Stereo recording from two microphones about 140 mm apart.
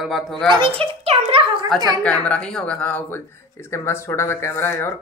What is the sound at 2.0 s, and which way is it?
Speech, 10° left (ahead or behind).